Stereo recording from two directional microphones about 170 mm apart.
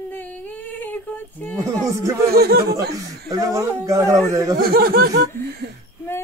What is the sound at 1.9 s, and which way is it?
Speech, 15° right (ahead or behind).